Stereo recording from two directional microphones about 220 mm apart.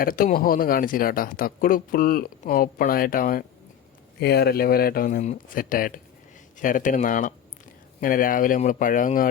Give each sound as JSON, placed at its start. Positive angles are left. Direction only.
{"t": 0.0, "sound": "speech", "side_deg": 40}